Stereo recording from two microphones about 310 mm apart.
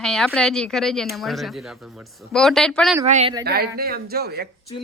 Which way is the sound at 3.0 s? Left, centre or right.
Right.